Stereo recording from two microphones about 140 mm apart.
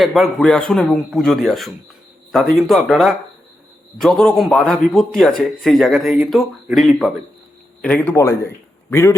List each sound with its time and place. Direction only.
0.0 s a man's voice: centre (ahead or behind)
7.8 s a man's voice: 10° left (ahead or behind)